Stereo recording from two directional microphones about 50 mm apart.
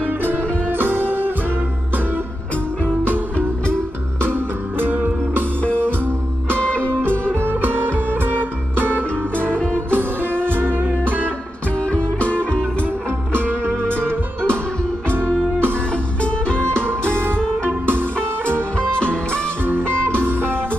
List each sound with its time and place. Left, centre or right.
0.0 s music: right
4.7 s music: right
6.6 s music: left
7.3 s music: right
9.6 s music: centre
10.4 s music: right
11.8 s music: left
13.3 s music: right
15.0 s music: right
16.2 s music: left
16.7 s music: right
18.8 s music: left
20.2 s music: right